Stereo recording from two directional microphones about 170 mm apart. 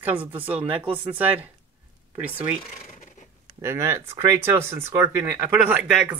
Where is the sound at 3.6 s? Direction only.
15° right (ahead or behind).